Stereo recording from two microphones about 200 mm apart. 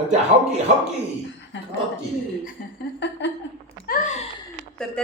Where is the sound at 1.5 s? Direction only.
60° left (ahead or behind).